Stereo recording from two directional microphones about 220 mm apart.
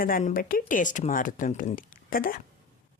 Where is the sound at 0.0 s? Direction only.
35° left (ahead or behind).